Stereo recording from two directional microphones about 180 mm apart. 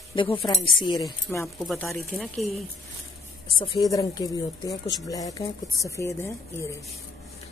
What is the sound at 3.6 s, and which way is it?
Speech, 25° left (ahead or behind).